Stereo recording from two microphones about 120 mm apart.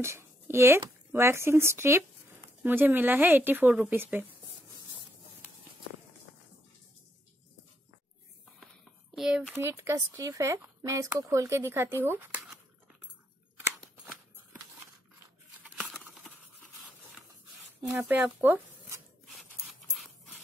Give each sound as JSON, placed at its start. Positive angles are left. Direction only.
{"t": 0.0, "sound": "a woman's voice", "side_deg": -20}
{"t": 9.1, "sound": "a sound", "side_deg": -5}
{"t": 9.6, "sound": "speech", "side_deg": -20}
{"t": 15.6, "sound": "tearing", "side_deg": -5}
{"t": 17.9, "sound": "speech", "side_deg": -20}
{"t": 19.2, "sound": "a sound", "side_deg": 0}